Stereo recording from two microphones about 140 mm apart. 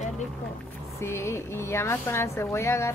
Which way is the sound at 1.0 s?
20° left (ahead or behind).